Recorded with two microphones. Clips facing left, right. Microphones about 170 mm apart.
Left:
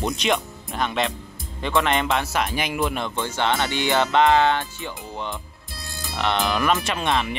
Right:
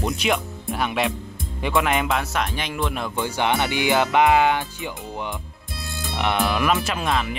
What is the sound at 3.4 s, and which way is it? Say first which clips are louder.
Speech: right 1 dB; 15° right (ahead or behind).